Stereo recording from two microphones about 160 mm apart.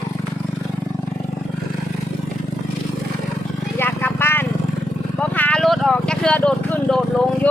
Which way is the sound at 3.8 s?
15° left (ahead or behind).